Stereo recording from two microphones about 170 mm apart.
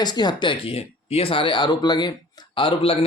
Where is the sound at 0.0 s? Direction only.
25° left (ahead or behind).